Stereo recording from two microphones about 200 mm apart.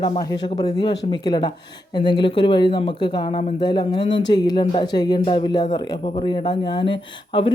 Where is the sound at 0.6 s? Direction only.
20° left (ahead or behind).